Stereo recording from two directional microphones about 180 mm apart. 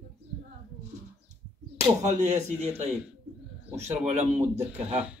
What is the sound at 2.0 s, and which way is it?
Speech, 40° right (ahead or behind).